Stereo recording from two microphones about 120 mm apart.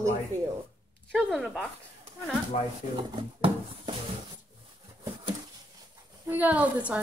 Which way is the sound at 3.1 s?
45° right (ahead or behind).